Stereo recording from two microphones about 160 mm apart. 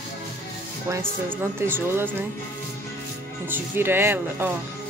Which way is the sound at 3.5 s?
15° right (ahead or behind).